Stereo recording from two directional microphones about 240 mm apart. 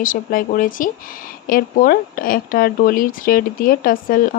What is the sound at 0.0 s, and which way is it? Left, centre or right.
Speech, left.